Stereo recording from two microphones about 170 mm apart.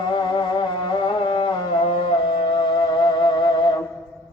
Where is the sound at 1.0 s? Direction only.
30° left (ahead or behind).